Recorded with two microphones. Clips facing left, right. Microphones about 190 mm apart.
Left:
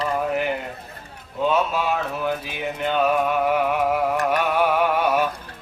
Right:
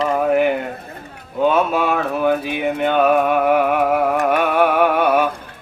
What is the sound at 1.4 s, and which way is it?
Speech, 55° right (ahead or behind).